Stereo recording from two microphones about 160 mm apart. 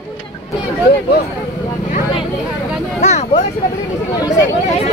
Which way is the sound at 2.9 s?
45° left (ahead or behind).